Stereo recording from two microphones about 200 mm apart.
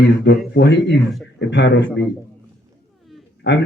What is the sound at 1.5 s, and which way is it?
Speech, 60° left (ahead or behind).